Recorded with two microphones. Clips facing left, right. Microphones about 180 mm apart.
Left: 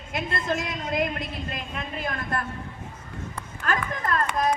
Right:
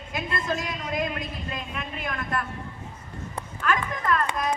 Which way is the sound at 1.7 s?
35° left (ahead or behind).